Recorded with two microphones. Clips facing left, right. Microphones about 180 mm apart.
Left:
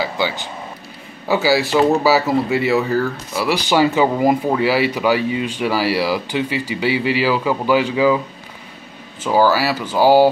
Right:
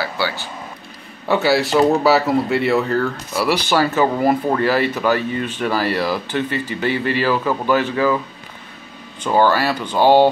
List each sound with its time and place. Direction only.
0.0 s speech: 15° left (ahead or behind)
1.2 s speech: centre (ahead or behind)
3.5 s speech: 15° left (ahead or behind)
9.2 s speech: 5° left (ahead or behind)